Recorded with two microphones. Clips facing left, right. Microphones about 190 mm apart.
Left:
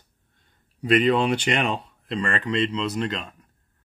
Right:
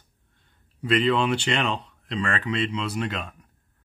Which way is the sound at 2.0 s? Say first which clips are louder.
Left 1 dB; centre (ahead or behind).